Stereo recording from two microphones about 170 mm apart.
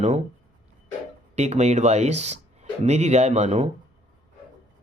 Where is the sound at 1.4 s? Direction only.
40° right (ahead or behind).